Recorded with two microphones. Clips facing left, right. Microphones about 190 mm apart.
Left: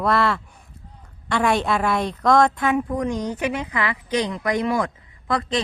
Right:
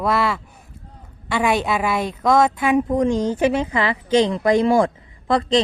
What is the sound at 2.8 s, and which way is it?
A woman's voice, 25° right (ahead or behind).